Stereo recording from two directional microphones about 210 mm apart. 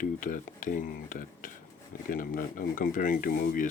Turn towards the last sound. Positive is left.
turn(degrees=40)  # may be behind; listen again after turning